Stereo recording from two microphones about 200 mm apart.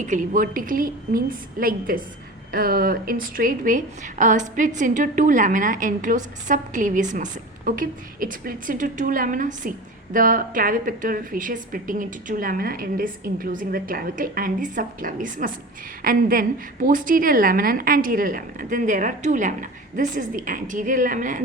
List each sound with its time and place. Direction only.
0.0 s a woman's voice: 40° right (ahead or behind)